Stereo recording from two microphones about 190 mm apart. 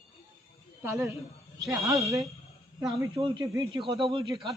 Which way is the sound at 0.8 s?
15° right (ahead or behind).